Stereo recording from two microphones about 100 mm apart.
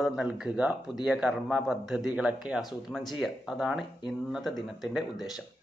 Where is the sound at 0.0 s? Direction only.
10° right (ahead or behind).